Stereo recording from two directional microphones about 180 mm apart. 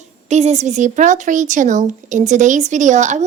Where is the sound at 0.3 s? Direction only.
40° right (ahead or behind).